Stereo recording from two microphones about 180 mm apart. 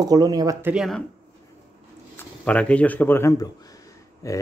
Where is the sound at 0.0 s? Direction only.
20° right (ahead or behind).